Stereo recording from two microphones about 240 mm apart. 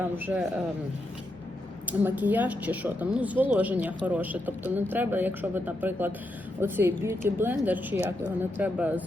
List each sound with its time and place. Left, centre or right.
0.0 s a woman's voice: centre
1.9 s a woman's voice: centre